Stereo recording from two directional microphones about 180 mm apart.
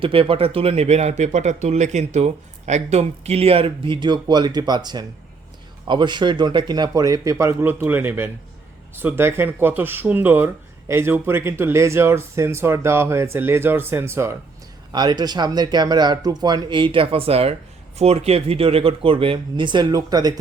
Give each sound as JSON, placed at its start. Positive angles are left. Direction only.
{"t": 0.0, "sound": "speech", "side_deg": -30}